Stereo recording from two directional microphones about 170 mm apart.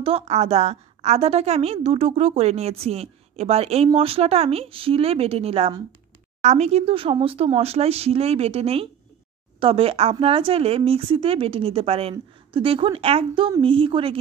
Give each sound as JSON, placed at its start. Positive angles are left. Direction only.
{"t": 0.0, "sound": "a woman's voice", "side_deg": -40}